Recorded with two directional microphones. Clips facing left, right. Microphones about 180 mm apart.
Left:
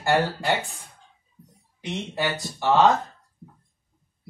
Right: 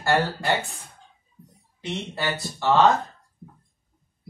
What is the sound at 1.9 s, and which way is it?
Speech, 15° left (ahead or behind).